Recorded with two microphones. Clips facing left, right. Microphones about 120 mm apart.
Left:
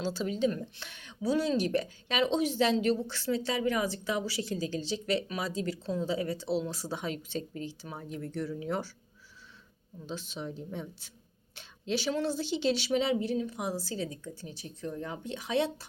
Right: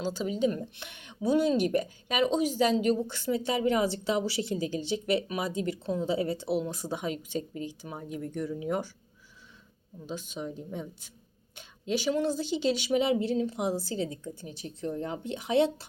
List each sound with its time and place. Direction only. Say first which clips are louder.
0.0 s a woman's voice: right 1 dB; 10° right (ahead or behind)
10.0 s speech: right 2 dB; 10° right (ahead or behind)
11.9 s speech: right 3 dB; 10° right (ahead or behind)
13.2 s a woman's voice: right 4 dB; 30° right (ahead or behind)